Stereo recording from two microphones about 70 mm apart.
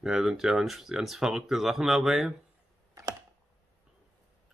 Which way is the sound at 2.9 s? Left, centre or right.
Right.